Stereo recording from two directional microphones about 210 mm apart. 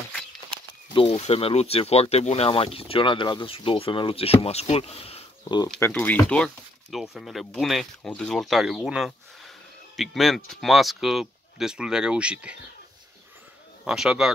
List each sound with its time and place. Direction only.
0.9 s speech: 25° left (ahead or behind)
5.8 s speech: 10° left (ahead or behind)
13.8 s speech: 5° right (ahead or behind)